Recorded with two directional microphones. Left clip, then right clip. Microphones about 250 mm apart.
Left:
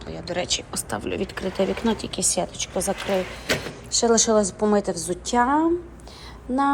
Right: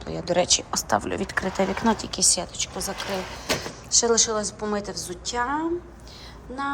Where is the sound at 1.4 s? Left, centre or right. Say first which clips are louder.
Left 1 dB; right.